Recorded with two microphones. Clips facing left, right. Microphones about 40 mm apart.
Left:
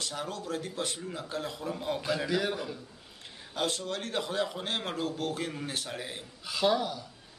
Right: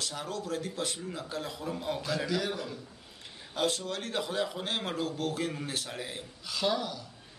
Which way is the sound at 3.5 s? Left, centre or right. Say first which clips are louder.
Right 1 dB; centre.